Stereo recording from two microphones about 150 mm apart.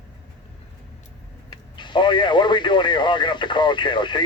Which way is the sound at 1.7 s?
30° left (ahead or behind).